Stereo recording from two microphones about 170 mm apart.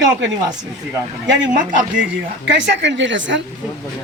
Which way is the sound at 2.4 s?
90° right.